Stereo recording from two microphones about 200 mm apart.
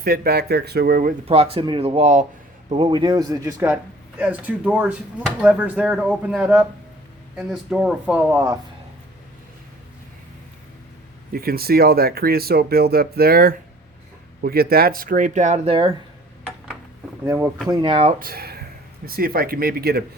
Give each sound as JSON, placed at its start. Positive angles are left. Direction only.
{"t": 0.0, "sound": "speech", "side_deg": -50}
{"t": 1.3, "sound": "speech", "side_deg": -30}
{"t": 11.3, "sound": "speech", "side_deg": -50}
{"t": 17.2, "sound": "speech", "side_deg": -15}
{"t": 17.7, "sound": "speech", "side_deg": -25}
{"t": 18.2, "sound": "speech", "side_deg": -50}